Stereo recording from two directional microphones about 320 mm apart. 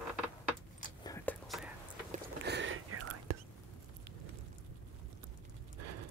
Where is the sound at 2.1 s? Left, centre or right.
Right.